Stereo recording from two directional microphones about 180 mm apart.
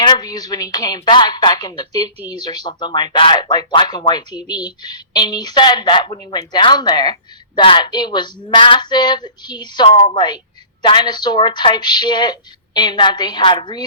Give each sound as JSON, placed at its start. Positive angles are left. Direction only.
{"t": 0.0, "sound": "speech", "side_deg": 25}